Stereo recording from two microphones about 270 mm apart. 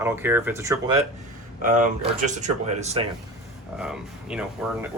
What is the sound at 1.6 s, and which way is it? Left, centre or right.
Speech, right.